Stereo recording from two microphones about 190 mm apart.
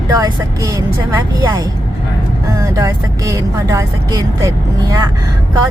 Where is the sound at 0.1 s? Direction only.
20° right (ahead or behind).